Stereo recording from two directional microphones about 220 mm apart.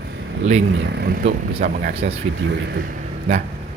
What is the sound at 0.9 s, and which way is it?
Speech, 45° right (ahead or behind).